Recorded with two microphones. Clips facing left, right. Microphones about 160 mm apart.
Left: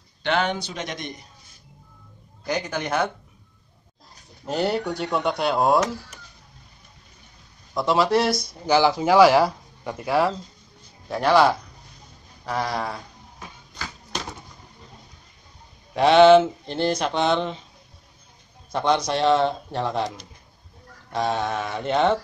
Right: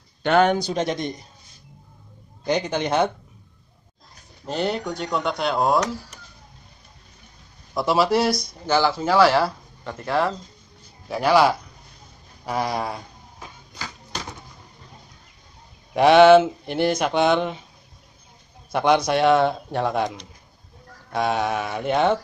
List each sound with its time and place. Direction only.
0.2 s a man's voice: 45° right (ahead or behind); by 1.1 s 30° right (ahead or behind)
2.4 s a man's voice: 25° right (ahead or behind)
4.5 s speech: centre (ahead or behind)
7.7 s speech: 5° right (ahead or behind)
8.6 s speech: 15° left (ahead or behind)
11.1 s speech: 5° right (ahead or behind)
15.9 s speech: 15° right (ahead or behind)
18.7 s speech: 10° right (ahead or behind)
21.1 s speech: 10° right (ahead or behind)